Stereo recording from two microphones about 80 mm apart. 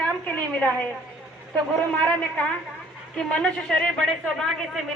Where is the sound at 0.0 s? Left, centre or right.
Centre.